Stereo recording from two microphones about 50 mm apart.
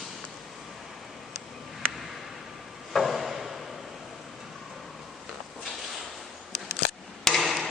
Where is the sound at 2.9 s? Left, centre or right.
Centre.